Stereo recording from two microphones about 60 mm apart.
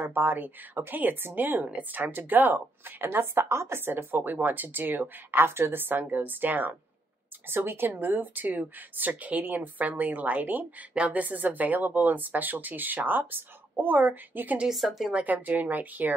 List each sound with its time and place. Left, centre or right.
0.0 s a woman's voice: right
14.7 s speech: centre
15.1 s speech: right